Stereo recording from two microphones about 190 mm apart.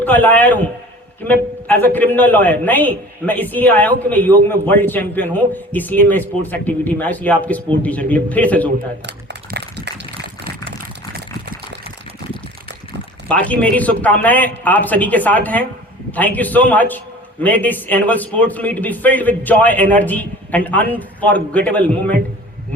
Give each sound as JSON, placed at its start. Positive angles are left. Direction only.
{"t": 0.0, "sound": "a man's voice", "side_deg": 10}
{"t": 9.0, "sound": "a sound", "side_deg": -60}
{"t": 13.2, "sound": "a man's voice", "side_deg": 5}